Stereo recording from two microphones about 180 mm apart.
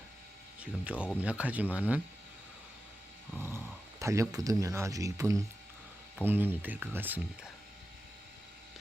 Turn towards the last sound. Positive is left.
turn(degrees=-10)  # may be behind; listen again after turning